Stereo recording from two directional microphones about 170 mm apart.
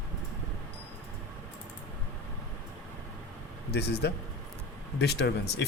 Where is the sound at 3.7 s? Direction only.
70° left (ahead or behind).